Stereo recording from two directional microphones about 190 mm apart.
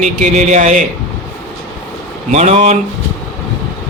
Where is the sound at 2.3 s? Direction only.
35° right (ahead or behind).